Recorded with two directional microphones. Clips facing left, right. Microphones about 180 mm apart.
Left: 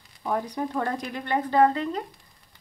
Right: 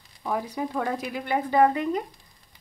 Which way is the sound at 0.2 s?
5° right (ahead or behind).